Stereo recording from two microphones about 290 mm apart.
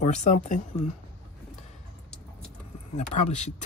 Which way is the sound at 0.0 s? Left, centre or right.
Left.